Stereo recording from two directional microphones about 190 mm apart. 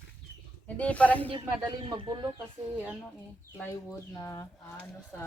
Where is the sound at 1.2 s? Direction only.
25° right (ahead or behind).